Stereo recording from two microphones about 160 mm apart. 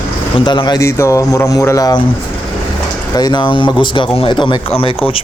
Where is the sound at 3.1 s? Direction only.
25° left (ahead or behind).